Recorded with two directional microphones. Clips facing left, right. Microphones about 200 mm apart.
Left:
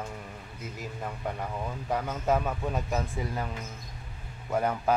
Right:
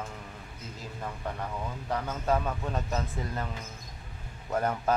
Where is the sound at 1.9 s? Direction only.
15° left (ahead or behind).